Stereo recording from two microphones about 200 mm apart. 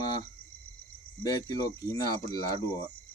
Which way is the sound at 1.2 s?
20° left (ahead or behind).